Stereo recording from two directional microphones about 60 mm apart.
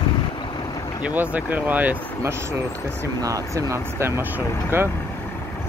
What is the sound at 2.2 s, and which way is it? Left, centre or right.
Speech, right.